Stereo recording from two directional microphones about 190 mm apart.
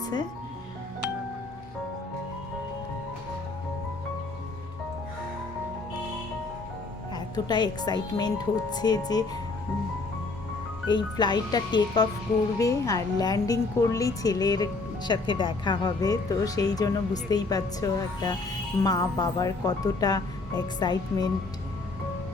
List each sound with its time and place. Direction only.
7.1 s a woman's voice: 20° left (ahead or behind)
10.8 s a woman's voice: 25° left (ahead or behind)